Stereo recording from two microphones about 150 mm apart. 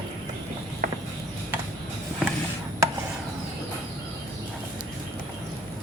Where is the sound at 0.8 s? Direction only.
70° right (ahead or behind).